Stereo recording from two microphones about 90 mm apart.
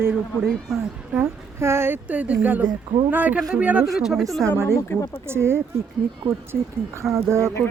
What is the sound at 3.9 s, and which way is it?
Speech, 5° right (ahead or behind).